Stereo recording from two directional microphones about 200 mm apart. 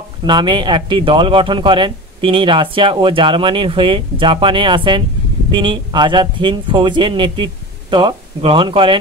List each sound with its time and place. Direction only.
0.3 s speech: 25° right (ahead or behind)